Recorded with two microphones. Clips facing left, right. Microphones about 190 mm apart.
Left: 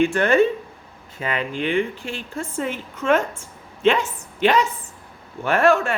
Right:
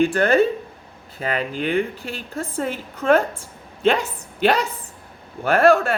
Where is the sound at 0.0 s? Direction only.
35° right (ahead or behind).